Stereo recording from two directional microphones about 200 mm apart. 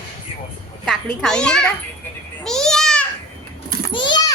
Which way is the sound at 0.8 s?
5° left (ahead or behind).